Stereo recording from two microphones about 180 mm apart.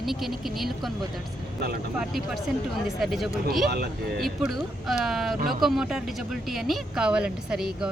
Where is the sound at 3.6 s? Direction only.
60° right (ahead or behind).